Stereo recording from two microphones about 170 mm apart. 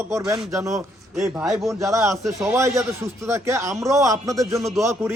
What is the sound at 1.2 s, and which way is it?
A man's voice, 15° right (ahead or behind).